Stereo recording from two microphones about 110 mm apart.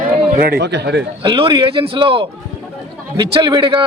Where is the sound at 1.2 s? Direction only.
50° right (ahead or behind).